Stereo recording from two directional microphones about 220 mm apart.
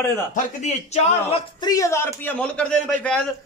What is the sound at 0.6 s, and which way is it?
A man's voice, 30° left (ahead or behind).